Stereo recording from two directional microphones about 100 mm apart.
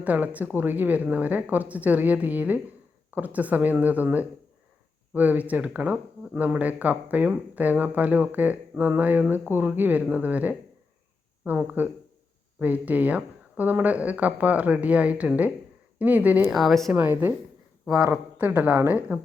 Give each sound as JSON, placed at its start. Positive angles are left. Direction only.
{"t": 0.0, "sound": "speech", "side_deg": -15}
{"t": 16.5, "sound": "speech", "side_deg": 0}
{"t": 16.9, "sound": "speech", "side_deg": -15}
{"t": 17.8, "sound": "speech", "side_deg": -5}